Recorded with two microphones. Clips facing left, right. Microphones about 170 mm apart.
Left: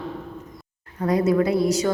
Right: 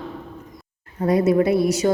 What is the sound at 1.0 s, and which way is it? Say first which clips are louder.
Speech: right 2 dB; 25° right (ahead or behind).